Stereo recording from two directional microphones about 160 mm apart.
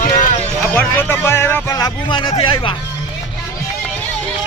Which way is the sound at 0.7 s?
10° left (ahead or behind).